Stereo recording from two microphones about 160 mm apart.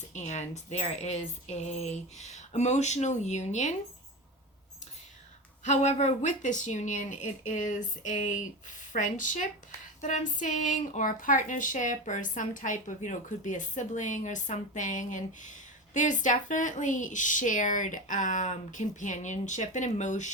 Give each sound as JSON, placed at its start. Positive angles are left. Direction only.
{"t": 0.1, "sound": "speech", "side_deg": 45}
{"t": 5.6, "sound": "speech", "side_deg": 50}